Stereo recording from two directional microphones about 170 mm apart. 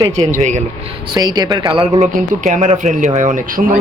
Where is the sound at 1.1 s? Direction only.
25° right (ahead or behind).